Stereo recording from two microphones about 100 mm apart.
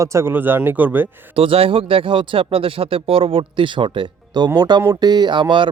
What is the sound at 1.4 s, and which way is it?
Speech, 65° right (ahead or behind).